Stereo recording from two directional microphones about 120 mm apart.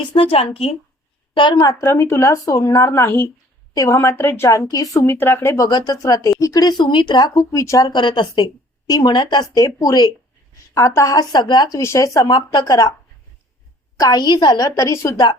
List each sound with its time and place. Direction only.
0.1 s a woman's voice: 50° left (ahead or behind)
1.3 s a woman's voice: 40° left (ahead or behind)
1.8 s speech: 20° left (ahead or behind)
5.6 s speech: 35° left (ahead or behind)
7.3 s speech: 25° left (ahead or behind)
11.8 s speech: 25° left (ahead or behind)
14.0 s speech: 35° left (ahead or behind)